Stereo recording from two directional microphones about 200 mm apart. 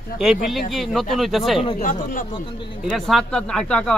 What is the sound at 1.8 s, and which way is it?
Speech, 40° left (ahead or behind).